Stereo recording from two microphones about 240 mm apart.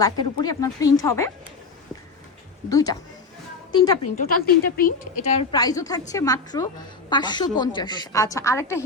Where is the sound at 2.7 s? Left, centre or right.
Centre.